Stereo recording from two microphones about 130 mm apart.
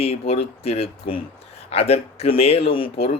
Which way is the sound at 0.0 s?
50° left (ahead or behind).